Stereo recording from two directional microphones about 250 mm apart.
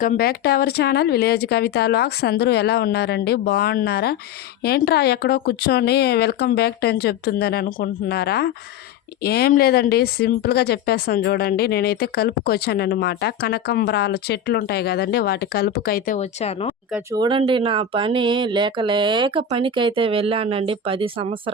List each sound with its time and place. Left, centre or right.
0.0 s a woman's voice: left
16.9 s speech: centre